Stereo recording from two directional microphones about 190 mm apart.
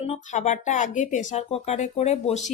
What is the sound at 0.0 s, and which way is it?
Speech, 35° left (ahead or behind).